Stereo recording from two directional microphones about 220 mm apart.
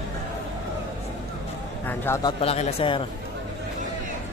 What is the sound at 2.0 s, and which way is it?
Speech, 15° left (ahead or behind).